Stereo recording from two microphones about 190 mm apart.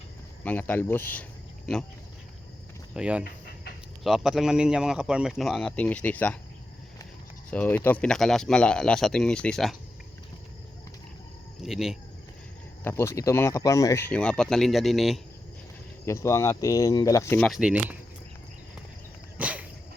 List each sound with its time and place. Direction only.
0.4 s speech: 10° left (ahead or behind)
2.9 s speech: 5° right (ahead or behind)
3.2 s a sound: 55° left (ahead or behind)
4.0 s speech: centre (ahead or behind)
7.5 s speech: 10° left (ahead or behind)
11.6 s speech: centre (ahead or behind)
12.8 s speech: 15° left (ahead or behind)
16.0 s speech: 15° left (ahead or behind)
17.5 s speech: 5° right (ahead or behind)
19.4 s dog: 5° right (ahead or behind)